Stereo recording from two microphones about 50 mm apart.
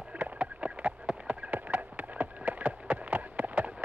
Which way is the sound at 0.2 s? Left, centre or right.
Right.